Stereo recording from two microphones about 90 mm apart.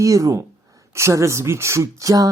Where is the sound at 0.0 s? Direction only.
35° right (ahead or behind).